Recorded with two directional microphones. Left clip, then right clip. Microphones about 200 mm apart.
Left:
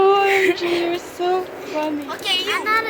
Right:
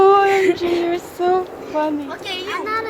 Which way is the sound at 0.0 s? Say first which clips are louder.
Right 3 dB; 10° right (ahead or behind).